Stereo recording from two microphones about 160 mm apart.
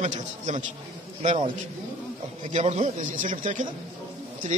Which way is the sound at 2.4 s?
45° right (ahead or behind).